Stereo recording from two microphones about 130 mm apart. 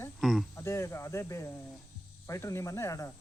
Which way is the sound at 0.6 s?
20° left (ahead or behind).